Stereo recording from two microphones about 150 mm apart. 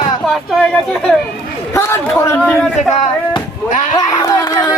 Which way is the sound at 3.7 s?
60° left (ahead or behind).